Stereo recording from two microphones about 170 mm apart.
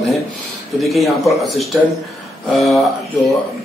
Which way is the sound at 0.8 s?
Centre (ahead or behind).